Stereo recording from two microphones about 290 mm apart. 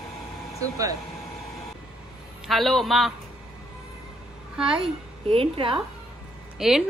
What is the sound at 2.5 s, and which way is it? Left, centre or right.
Speech, centre.